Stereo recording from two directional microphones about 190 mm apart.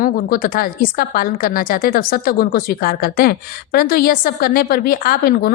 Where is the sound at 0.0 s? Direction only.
50° left (ahead or behind).